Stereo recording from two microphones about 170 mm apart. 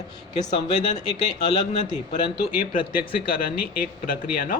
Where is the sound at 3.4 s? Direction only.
60° left (ahead or behind).